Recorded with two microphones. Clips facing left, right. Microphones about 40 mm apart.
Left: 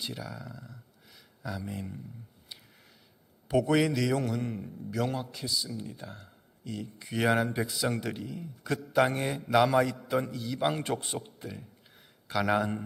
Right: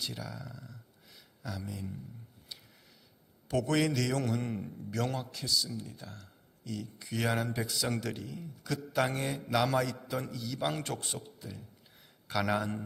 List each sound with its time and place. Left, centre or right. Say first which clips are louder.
0.1 s a man's voice: left 2 dB; centre
1.7 s speech: left 3 dB; left
2.5 s a sound: left 1 dB; centre
3.5 s a man's voice: left 4 dB; centre
11.4 s speech: left 5 dB; left
12.3 s a man's voice: left 3 dB; centre
12.5 s a man's voice: left 4 dB; left